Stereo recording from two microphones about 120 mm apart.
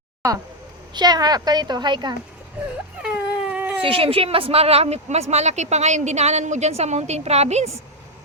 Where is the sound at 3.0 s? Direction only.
10° right (ahead or behind).